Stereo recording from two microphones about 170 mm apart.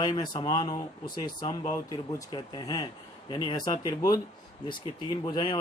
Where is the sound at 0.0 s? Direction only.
25° left (ahead or behind).